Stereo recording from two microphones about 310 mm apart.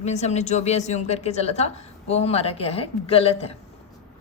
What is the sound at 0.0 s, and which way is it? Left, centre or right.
A woman's voice, left.